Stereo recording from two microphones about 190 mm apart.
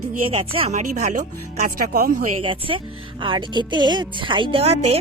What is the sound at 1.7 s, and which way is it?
Speech, 50° right (ahead or behind).